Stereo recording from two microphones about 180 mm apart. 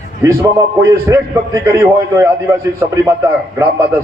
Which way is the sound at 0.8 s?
15° right (ahead or behind).